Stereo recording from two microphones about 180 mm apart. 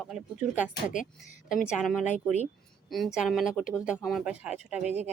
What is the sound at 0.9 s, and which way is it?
Speech, 45° left (ahead or behind).